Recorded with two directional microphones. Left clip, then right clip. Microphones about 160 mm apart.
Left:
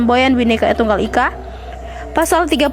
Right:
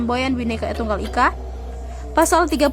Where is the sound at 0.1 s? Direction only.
25° left (ahead or behind).